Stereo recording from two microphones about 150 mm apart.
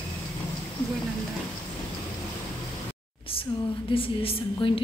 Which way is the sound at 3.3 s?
35° left (ahead or behind).